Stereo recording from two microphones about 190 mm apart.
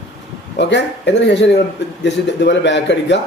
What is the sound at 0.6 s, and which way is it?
A man's voice, 65° left (ahead or behind).